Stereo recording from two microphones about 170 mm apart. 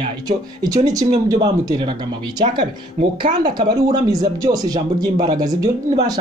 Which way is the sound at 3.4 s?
25° right (ahead or behind).